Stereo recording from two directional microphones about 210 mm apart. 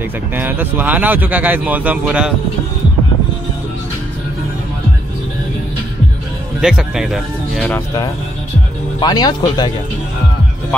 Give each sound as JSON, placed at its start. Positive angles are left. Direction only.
{"t": 0.3, "sound": "speech", "side_deg": -10}
{"t": 6.6, "sound": "speech", "side_deg": 0}
{"t": 9.0, "sound": "speech", "side_deg": 20}